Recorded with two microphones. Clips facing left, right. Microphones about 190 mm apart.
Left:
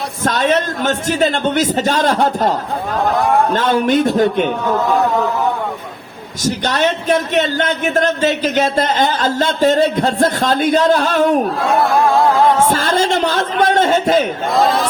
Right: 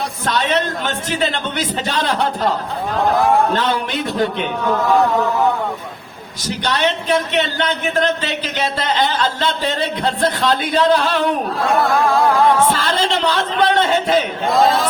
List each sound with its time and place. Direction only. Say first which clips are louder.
0.3 s speech: left 3 dB; 45° left (ahead or behind)
3.5 s speech: left 6 dB; 45° left (ahead or behind)
6.4 s speech: left 3 dB; 45° left (ahead or behind)
12.6 s speech: left 3 dB; 45° left (ahead or behind)
14.5 s speech: even; centre (ahead or behind)